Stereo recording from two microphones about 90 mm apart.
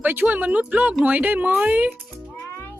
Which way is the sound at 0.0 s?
20° right (ahead or behind).